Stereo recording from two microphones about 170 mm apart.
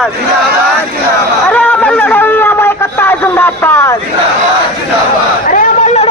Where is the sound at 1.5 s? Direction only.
10° left (ahead or behind).